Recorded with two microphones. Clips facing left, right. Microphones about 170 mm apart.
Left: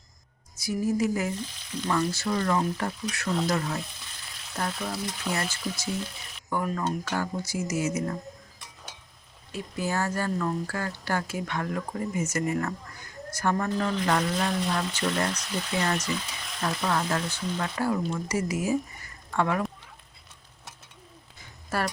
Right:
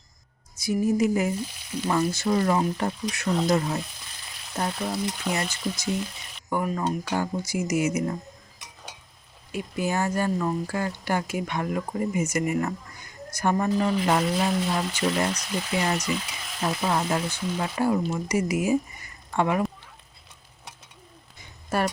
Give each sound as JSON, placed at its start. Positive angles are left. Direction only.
{"t": 0.6, "sound": "speech", "side_deg": -20}
{"t": 1.4, "sound": "speech", "side_deg": -10}
{"t": 1.9, "sound": "speech", "side_deg": -20}
{"t": 9.5, "sound": "speech", "side_deg": -15}
{"t": 21.7, "sound": "speech", "side_deg": -20}